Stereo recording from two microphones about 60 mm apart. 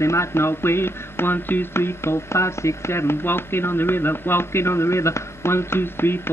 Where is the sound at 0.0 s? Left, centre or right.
Left.